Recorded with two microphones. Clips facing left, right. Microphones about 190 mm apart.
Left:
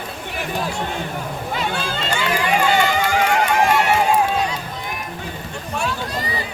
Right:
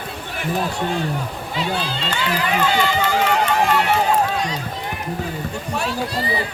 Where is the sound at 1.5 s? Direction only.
45° left (ahead or behind).